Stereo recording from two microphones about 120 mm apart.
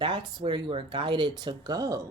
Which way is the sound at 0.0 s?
40° right (ahead or behind).